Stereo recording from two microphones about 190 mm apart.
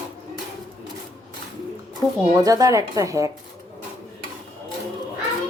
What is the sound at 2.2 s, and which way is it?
Speech, 15° right (ahead or behind).